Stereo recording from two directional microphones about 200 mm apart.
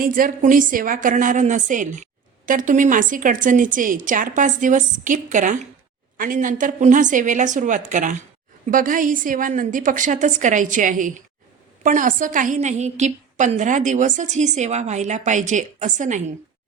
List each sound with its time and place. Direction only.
0.0 s a woman's voice: 45° right (ahead or behind)